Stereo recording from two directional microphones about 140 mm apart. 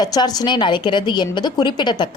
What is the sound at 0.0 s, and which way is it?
A woman's voice, 30° left (ahead or behind).